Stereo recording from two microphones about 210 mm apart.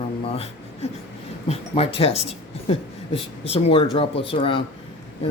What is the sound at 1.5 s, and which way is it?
Speech, 30° left (ahead or behind).